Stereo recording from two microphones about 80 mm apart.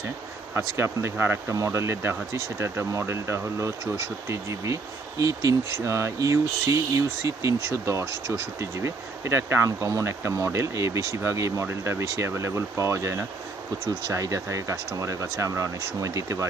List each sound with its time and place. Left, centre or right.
0.5 s speech: right
1.5 s speech: right
9.6 s speech: right